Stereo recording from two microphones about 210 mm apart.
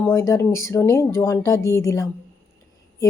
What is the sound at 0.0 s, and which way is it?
Speech, 15° left (ahead or behind).